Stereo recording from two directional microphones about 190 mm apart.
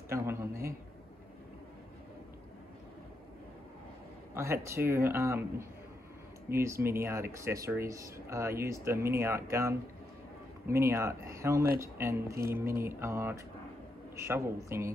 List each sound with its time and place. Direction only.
0.1 s speech: 15° right (ahead or behind)
4.3 s speech: 15° right (ahead or behind)